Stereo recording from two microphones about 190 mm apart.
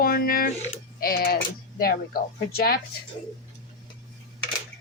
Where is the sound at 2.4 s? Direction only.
55° left (ahead or behind).